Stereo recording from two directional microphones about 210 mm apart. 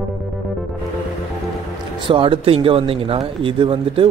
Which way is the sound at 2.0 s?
25° right (ahead or behind).